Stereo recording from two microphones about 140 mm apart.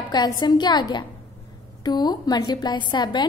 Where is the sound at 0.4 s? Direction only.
30° left (ahead or behind).